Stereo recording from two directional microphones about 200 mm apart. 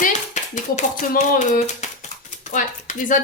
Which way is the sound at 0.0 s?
40° left (ahead or behind).